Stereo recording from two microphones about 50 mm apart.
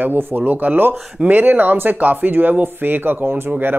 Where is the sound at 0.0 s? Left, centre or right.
Right.